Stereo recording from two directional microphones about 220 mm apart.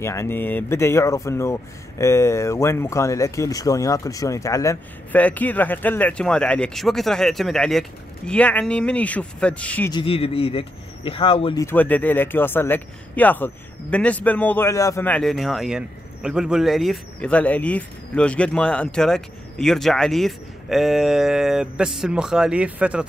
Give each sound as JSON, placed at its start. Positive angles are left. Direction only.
{"t": 0.0, "sound": "speech", "side_deg": 15}
{"t": 9.9, "sound": "speech", "side_deg": 25}
{"t": 11.6, "sound": "speech", "side_deg": 10}